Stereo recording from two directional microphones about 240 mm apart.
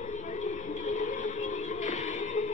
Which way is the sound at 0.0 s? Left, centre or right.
Left.